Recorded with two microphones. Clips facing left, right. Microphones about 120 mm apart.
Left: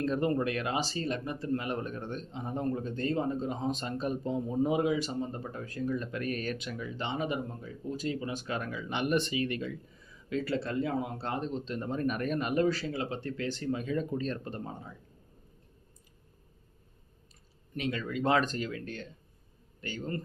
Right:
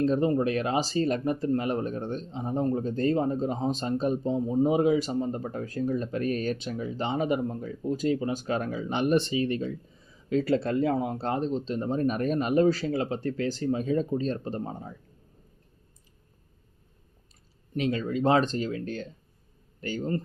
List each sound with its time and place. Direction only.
0.0 s speech: 25° right (ahead or behind)
4.6 s speech: 35° right (ahead or behind)
17.7 s speech: 35° right (ahead or behind)